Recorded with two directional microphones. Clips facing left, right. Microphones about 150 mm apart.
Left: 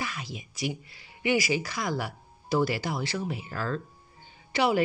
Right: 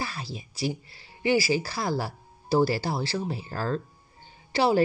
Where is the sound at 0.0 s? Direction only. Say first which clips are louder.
Right 1 dB; 35° right (ahead or behind).